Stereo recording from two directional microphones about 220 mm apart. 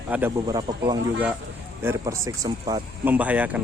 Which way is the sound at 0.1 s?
10° right (ahead or behind).